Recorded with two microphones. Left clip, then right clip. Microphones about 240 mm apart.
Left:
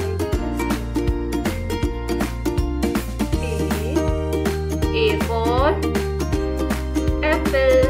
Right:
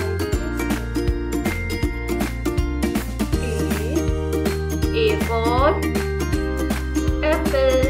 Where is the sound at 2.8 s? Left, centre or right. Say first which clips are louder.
Left 2 dB; centre.